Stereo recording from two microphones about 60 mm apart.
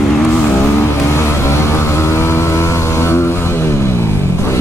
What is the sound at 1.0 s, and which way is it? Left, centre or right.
Vehicle, left.